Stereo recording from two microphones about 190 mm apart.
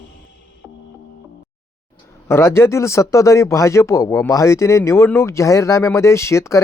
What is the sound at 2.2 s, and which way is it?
A man's voice, 15° left (ahead or behind).